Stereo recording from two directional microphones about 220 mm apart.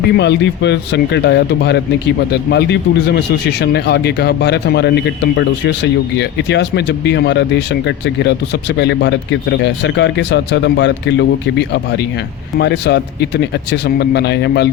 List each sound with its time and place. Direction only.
0.2 s speech: 50° left (ahead or behind)